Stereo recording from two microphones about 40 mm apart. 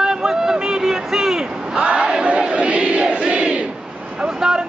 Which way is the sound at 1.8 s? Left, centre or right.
Right.